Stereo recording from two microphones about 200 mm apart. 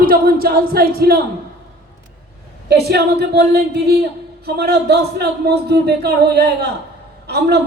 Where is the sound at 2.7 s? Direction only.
55° right (ahead or behind).